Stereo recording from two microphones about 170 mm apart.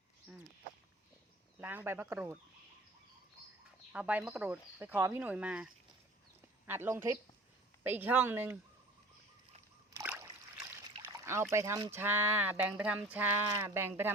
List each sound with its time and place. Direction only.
1.5 s speech: 10° right (ahead or behind)
3.9 s speech: 5° right (ahead or behind)
10.0 s a sound: 15° right (ahead or behind)
11.0 s pour: 15° right (ahead or behind)
11.5 s speech: 20° right (ahead or behind)